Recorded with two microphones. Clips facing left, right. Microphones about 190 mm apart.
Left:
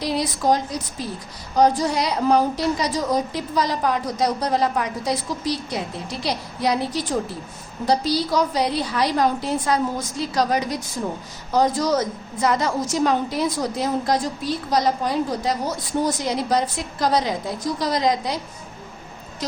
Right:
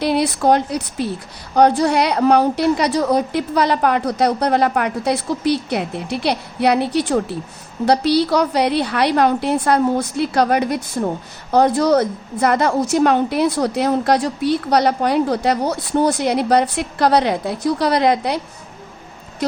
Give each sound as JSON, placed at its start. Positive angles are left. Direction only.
{"t": 0.0, "sound": "a woman's voice", "side_deg": -65}
{"t": 19.4, "sound": "speech", "side_deg": -60}